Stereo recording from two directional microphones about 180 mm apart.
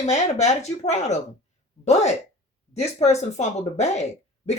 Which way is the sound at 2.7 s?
35° left (ahead or behind).